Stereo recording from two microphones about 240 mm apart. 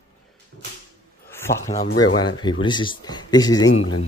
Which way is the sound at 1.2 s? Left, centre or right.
Centre.